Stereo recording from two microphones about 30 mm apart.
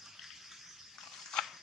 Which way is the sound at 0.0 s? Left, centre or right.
Centre.